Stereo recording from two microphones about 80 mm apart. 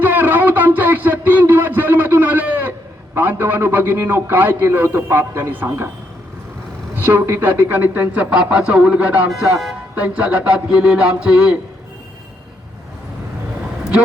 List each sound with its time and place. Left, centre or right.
0.0 s a sound: right
3.2 s a man's voice: right
6.9 s a man's voice: right; by 11.5 s centre